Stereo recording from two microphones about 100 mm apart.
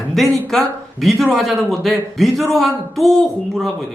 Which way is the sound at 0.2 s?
Centre (ahead or behind).